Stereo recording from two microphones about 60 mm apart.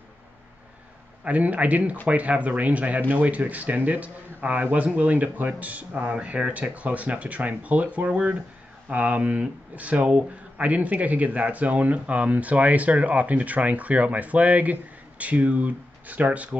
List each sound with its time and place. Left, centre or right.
1.2 s speech: right